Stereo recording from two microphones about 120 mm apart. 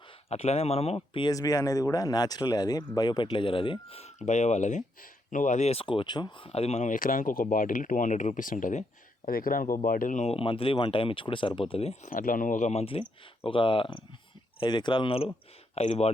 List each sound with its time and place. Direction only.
0.3 s speech: 60° left (ahead or behind)
0.9 s speech: 40° left (ahead or behind); by 4.8 s 80° left
5.3 s speech: 90° left
10.3 s speech: 50° left (ahead or behind); by 12.8 s 90° left
12.8 s speech: 50° left (ahead or behind)
15.7 s speech: 60° left (ahead or behind)